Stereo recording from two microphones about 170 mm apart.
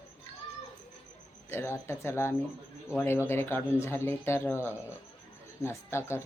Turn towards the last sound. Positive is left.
turn(degrees=15)  # may be behind; listen again after turning